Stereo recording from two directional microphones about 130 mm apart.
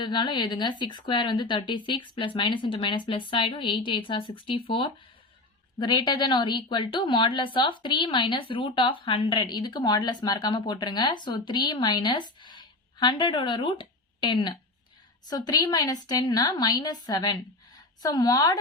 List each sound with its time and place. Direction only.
0.0 s a woman's voice: 35° left (ahead or behind)